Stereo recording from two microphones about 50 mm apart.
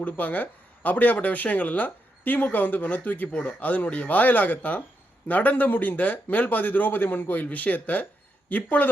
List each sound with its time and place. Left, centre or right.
0.0 s speech: left